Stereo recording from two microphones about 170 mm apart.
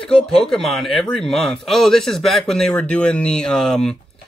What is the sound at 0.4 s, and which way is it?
Speech, centre (ahead or behind).